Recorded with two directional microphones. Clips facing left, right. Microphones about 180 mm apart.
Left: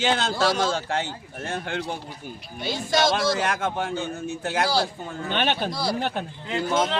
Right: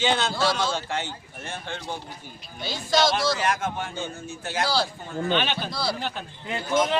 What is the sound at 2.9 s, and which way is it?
A man's voice, 50° left (ahead or behind).